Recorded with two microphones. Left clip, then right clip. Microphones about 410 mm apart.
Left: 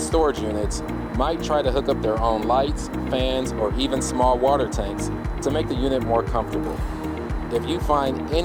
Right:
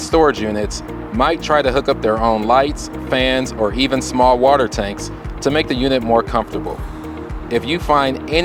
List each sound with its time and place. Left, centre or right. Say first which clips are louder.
0.1 s speech: right 8 dB; right
7.5 s speech: right 7 dB; right